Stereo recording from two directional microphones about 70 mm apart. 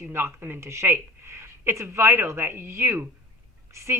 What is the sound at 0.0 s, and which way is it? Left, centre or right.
Speech, right.